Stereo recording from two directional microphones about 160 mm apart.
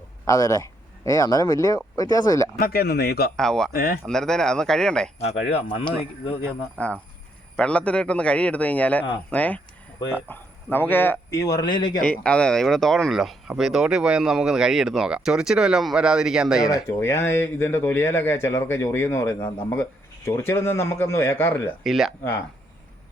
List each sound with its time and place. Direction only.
0.3 s speech: 20° left (ahead or behind)
2.6 s a man's voice: 70° left (ahead or behind)
3.3 s speech: 5° left (ahead or behind)
3.7 s a man's voice: 70° left (ahead or behind)
4.0 s speech: 5° left (ahead or behind)
5.2 s speech: 40° left (ahead or behind)
6.8 s speech: 10° left (ahead or behind); by 11.9 s 25° left (ahead or behind)
12.0 s speech: 5° left (ahead or behind)
16.7 s speech: 15° left (ahead or behind)
21.8 s speech: centre (ahead or behind)